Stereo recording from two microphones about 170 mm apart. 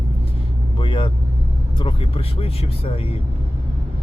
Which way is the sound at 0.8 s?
30° left (ahead or behind).